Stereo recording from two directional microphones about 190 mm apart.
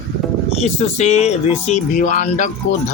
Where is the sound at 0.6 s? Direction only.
35° left (ahead or behind).